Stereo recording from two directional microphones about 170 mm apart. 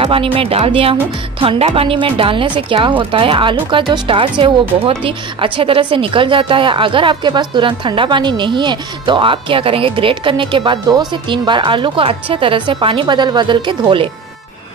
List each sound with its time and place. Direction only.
0.0 s a woman's voice: 30° right (ahead or behind)